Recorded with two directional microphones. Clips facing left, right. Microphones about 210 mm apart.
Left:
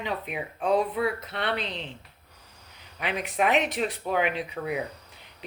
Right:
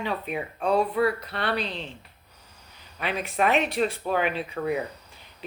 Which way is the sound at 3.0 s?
20° left (ahead or behind).